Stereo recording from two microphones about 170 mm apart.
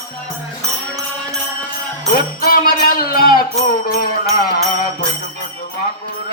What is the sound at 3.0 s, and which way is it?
Music, 60° left (ahead or behind).